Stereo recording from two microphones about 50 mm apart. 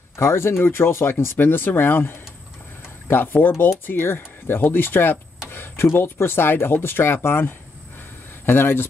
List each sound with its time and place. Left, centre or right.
0.2 s speech: left
5.5 s a sound: left
5.9 s speech: left